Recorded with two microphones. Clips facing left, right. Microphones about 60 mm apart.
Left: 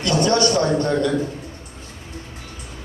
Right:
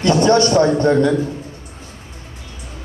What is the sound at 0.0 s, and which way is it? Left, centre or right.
A man's voice, right.